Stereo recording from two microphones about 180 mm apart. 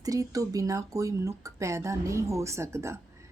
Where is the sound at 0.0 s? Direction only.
20° right (ahead or behind).